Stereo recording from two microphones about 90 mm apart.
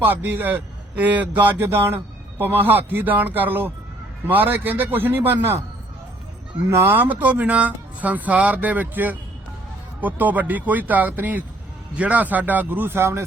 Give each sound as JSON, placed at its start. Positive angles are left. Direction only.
{"t": 0.0, "sound": "speech", "side_deg": -20}
{"t": 6.7, "sound": "speech", "side_deg": -25}